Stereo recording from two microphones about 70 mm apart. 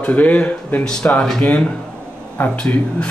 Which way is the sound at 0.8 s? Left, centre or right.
Centre.